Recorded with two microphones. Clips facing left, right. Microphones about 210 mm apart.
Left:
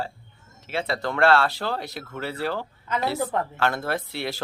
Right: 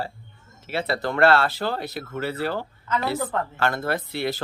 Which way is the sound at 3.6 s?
Centre (ahead or behind).